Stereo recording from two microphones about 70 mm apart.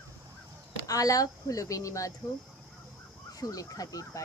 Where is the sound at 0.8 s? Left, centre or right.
Left.